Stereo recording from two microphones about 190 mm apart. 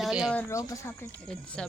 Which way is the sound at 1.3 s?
5° left (ahead or behind).